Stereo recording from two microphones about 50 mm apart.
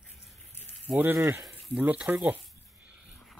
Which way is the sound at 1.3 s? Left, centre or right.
Centre.